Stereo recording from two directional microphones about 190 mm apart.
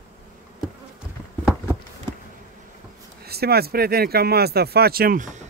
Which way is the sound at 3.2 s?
55° right (ahead or behind).